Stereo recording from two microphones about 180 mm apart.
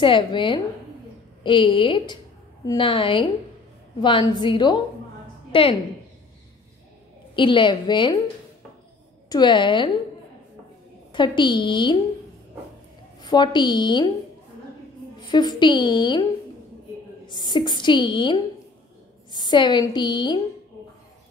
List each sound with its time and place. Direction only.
0.0 s a woman's voice: 25° left (ahead or behind)
7.3 s a woman's voice: 25° left (ahead or behind)
9.3 s a woman's voice: 25° left (ahead or behind)
11.1 s a woman's voice: 25° left (ahead or behind)
13.2 s a woman's voice: 25° left (ahead or behind)
15.1 s a woman's voice: 25° left (ahead or behind)
17.3 s a woman's voice: 25° left (ahead or behind)